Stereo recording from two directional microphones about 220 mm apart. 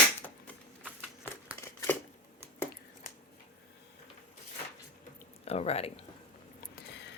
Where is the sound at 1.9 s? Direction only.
10° left (ahead or behind).